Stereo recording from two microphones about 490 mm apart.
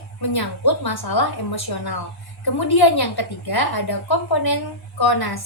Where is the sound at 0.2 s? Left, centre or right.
Left.